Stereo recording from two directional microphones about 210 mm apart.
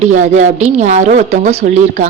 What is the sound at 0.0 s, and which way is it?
A woman's voice, 35° right (ahead or behind).